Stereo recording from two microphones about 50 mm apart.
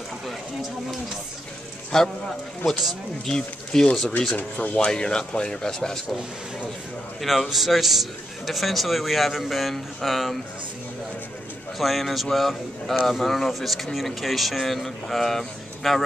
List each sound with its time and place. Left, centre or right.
1.9 s speech: centre
3.3 s speech: centre
7.2 s a man's voice: centre
11.8 s a man's voice: centre